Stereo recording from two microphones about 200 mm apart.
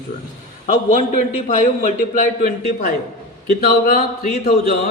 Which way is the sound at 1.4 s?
40° left (ahead or behind).